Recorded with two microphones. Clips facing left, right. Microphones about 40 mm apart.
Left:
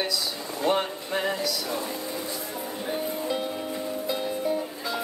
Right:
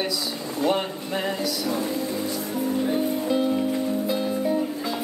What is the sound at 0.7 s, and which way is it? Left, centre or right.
Speech, centre.